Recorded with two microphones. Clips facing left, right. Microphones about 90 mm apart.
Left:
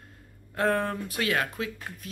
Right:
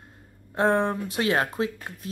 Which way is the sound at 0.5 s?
25° right (ahead or behind).